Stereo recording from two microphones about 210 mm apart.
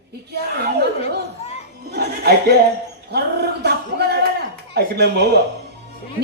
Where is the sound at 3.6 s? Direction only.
50° right (ahead or behind).